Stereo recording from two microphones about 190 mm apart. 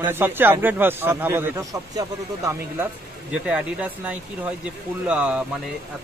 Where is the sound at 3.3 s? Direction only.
5° right (ahead or behind).